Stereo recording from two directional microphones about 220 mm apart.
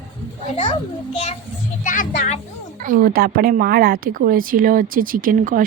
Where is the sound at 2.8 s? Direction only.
40° right (ahead or behind).